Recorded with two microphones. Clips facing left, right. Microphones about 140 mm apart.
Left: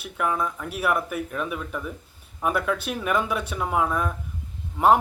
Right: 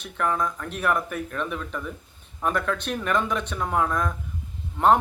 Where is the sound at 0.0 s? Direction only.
10° left (ahead or behind).